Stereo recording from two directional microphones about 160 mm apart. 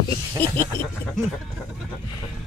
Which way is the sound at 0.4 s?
10° left (ahead or behind).